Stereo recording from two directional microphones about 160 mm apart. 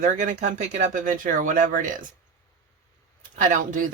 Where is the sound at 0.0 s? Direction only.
50° right (ahead or behind).